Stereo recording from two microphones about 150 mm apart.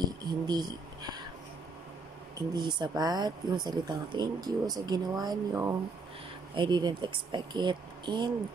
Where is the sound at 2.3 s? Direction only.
30° right (ahead or behind).